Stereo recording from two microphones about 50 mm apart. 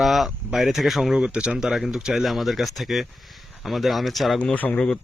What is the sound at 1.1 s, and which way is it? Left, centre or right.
Speech, centre.